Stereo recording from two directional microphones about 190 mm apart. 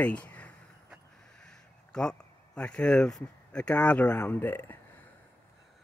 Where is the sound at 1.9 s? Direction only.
5° left (ahead or behind).